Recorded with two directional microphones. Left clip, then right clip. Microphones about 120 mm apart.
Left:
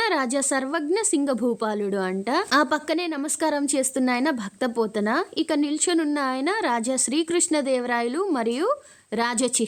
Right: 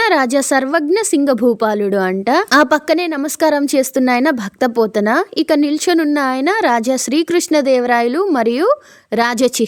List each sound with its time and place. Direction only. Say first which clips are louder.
0.0 s a woman's voice: right 10 dB; 40° right (ahead or behind)